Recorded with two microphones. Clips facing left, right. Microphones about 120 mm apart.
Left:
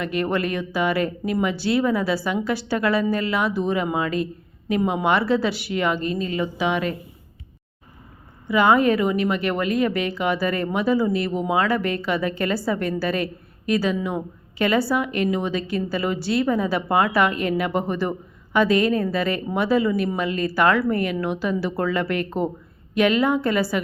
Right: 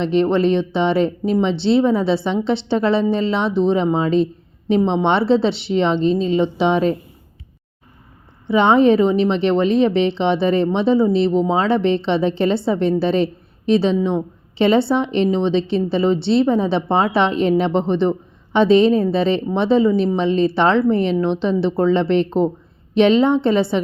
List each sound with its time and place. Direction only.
0.0 s a woman's voice: 25° right (ahead or behind)
8.4 s a woman's voice: 25° right (ahead or behind)